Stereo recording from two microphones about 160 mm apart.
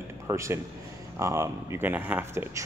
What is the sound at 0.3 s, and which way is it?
A man's voice, 20° right (ahead or behind).